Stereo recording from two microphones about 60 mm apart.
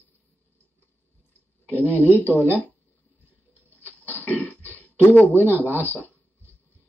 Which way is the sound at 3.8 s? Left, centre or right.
Left.